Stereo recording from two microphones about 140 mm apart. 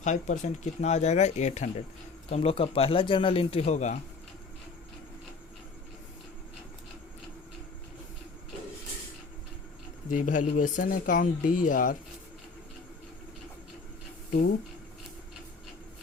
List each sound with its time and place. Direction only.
0.0 s speech: 60° left (ahead or behind)
2.3 s speech: 45° left (ahead or behind)
10.1 s speech: 65° left (ahead or behind)